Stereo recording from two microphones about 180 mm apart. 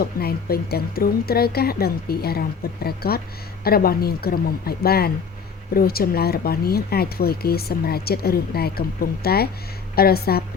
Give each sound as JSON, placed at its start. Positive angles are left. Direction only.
{"t": 0.0, "sound": "speech", "side_deg": 60}